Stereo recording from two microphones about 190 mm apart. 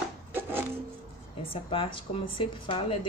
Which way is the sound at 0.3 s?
10° right (ahead or behind).